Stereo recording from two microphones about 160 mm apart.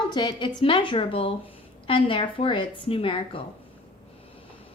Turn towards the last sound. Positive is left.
turn(degrees=35)  # may be behind; listen again after turning